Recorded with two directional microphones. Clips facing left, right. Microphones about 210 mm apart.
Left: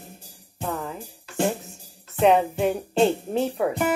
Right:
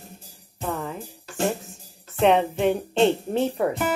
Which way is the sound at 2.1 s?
Centre (ahead or behind).